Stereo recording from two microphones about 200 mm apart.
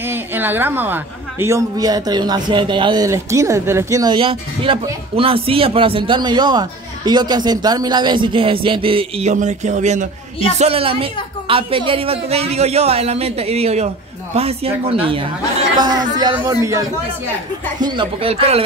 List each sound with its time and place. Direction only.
0.0 s a woman's voice: 10° right (ahead or behind); by 18.6 s 30° right (ahead or behind)